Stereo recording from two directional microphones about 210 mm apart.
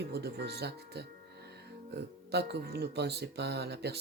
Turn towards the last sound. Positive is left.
turn(degrees=-50)  # may be behind; listen again after turning